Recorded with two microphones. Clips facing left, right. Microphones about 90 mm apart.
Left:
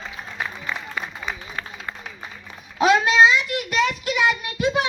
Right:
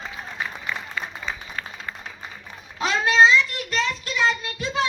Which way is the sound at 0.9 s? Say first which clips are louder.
Left 1 dB; 15° left (ahead or behind).